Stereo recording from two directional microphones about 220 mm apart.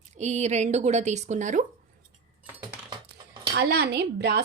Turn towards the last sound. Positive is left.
turn(degrees=-50)  # may be behind; listen again after turning